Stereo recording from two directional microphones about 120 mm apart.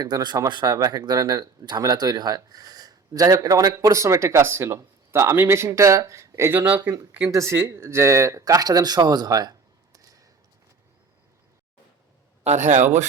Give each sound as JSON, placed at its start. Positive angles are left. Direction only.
{"t": 0.0, "sound": "speech", "side_deg": -35}
{"t": 12.5, "sound": "speech", "side_deg": -85}